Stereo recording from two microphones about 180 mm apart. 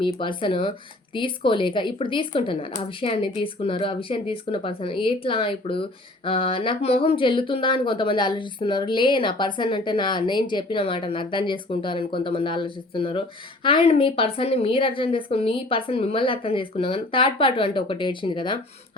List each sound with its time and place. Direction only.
0.0 s a woman's voice: 25° left (ahead or behind)